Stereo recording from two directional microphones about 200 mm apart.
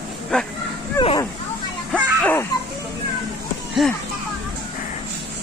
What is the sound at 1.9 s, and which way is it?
Music, 5° left (ahead or behind).